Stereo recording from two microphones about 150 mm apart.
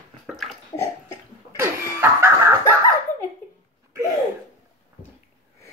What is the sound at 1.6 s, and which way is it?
Snicker, 20° right (ahead or behind).